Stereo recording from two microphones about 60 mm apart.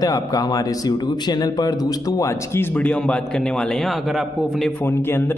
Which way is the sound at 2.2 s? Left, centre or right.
Left.